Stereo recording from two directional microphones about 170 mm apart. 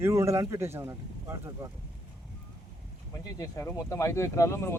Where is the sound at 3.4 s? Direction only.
15° left (ahead or behind).